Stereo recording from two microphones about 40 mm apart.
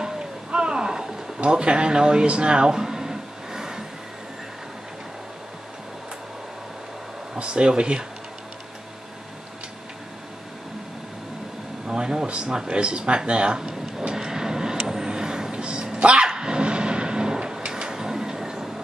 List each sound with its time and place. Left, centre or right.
0.0 s a sound: right
1.4 s speech: right
7.3 s speech: right
11.9 s speech: centre
13.6 s vehicle: centre